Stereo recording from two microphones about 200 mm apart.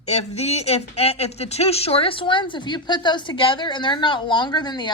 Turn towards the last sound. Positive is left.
turn(degrees=20)  # may be behind; listen again after turning